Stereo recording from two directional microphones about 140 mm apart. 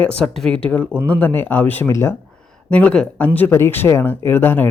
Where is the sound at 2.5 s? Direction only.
10° left (ahead or behind).